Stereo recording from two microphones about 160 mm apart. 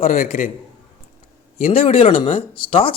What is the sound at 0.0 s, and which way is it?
Speech, 50° left (ahead or behind).